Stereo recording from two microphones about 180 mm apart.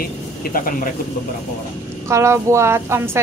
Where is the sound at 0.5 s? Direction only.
50° left (ahead or behind).